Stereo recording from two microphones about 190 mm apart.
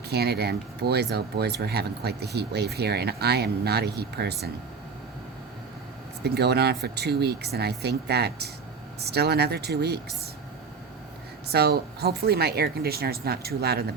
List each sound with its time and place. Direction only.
0.1 s speech: 60° right (ahead or behind)
6.2 s speech: 60° right (ahead or behind)
11.4 s speech: 55° right (ahead or behind)